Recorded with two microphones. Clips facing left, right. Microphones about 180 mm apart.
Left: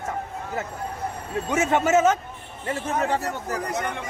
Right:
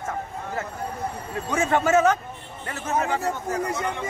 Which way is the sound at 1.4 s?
20° left (ahead or behind).